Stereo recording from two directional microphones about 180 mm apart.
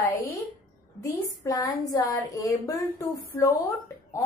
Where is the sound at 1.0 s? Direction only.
20° left (ahead or behind).